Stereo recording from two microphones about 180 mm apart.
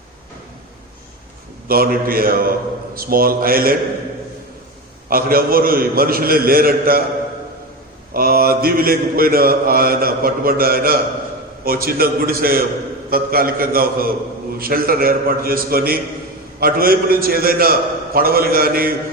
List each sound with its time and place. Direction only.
1.6 s mantra: 55° right (ahead or behind)
5.0 s mantra: 55° right (ahead or behind)
8.1 s mantra: 55° right (ahead or behind)